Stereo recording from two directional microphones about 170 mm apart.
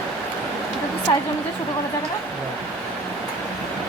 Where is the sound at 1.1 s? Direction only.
30° left (ahead or behind).